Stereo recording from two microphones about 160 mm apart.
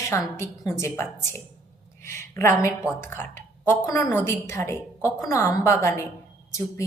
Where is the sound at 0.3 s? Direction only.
15° left (ahead or behind).